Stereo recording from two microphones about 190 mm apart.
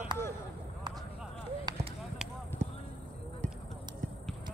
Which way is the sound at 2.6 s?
35° right (ahead or behind).